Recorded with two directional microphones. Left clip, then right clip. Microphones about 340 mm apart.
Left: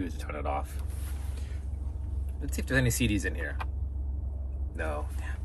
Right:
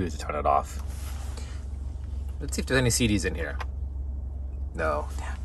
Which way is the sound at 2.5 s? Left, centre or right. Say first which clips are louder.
Right 4 dB; centre.